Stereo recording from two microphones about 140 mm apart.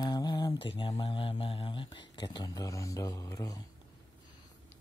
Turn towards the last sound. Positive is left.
turn(degrees=25)  # may be behind; listen again after turning